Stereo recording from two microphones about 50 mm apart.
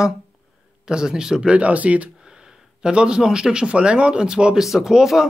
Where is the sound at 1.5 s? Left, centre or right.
Right.